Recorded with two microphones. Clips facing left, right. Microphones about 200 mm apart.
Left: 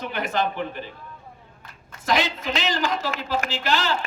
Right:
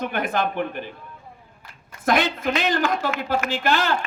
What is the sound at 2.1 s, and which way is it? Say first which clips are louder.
A man's voice: right 3 dB; 55° right (ahead or behind).